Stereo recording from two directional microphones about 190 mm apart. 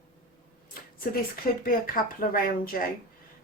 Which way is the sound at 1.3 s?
50° left (ahead or behind).